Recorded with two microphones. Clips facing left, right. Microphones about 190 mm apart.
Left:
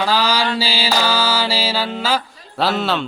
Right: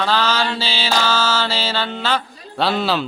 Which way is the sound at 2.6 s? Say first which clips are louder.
Even; centre (ahead or behind).